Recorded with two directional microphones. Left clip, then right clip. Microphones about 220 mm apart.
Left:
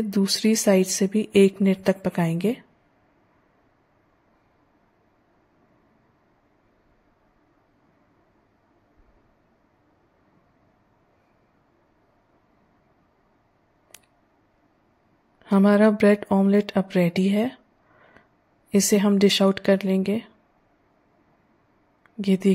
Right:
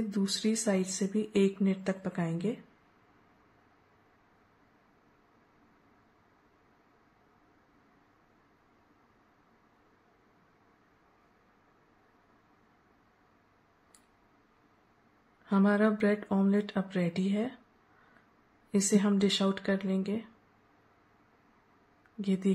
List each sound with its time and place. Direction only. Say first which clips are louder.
0.1 s speech: left 11 dB; 35° left (ahead or behind)
15.4 s speech: left 9 dB; 35° left (ahead or behind)
18.7 s speech: left 9 dB; 35° left (ahead or behind)
22.2 s speech: left 10 dB; 35° left (ahead or behind)